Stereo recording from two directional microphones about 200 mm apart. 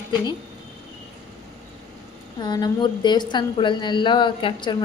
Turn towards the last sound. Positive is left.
turn(degrees=25)  # may be behind; listen again after turning